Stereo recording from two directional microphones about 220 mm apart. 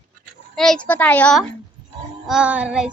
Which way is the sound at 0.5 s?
5° left (ahead or behind).